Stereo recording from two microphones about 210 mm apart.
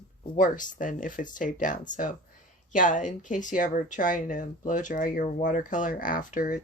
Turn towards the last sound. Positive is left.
turn(degrees=40)  # may be behind; listen again after turning